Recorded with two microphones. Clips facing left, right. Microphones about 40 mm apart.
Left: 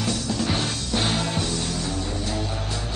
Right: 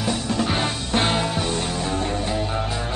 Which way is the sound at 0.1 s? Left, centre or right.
Right.